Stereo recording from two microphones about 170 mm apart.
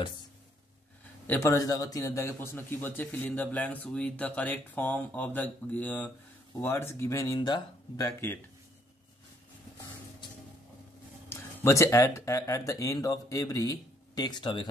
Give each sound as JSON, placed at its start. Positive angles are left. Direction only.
{"t": 1.2, "sound": "a man's voice", "side_deg": 15}
{"t": 11.2, "sound": "speech", "side_deg": 15}